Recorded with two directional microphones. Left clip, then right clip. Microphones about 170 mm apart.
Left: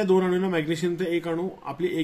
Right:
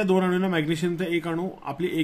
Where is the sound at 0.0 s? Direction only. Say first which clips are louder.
Left 1 dB; 30° right (ahead or behind).